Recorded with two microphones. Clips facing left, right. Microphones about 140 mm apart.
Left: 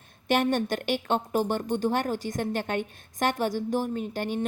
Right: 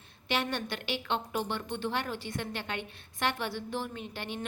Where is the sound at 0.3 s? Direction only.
45° left (ahead or behind).